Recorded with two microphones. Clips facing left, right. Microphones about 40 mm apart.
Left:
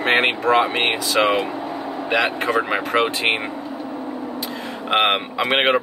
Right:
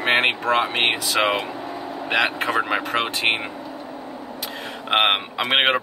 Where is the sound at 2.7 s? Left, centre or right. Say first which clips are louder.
Left 3 dB; centre.